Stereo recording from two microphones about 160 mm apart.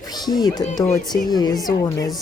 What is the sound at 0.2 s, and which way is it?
Speech, 25° left (ahead or behind).